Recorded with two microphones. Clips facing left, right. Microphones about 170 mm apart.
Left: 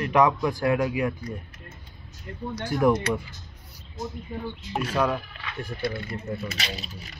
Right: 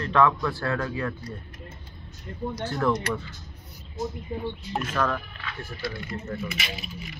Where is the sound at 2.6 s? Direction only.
15° left (ahead or behind).